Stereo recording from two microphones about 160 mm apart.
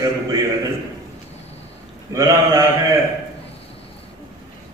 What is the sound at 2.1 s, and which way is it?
Speech, 20° right (ahead or behind).